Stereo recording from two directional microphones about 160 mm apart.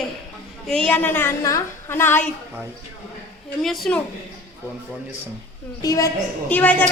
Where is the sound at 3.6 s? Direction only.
Centre (ahead or behind).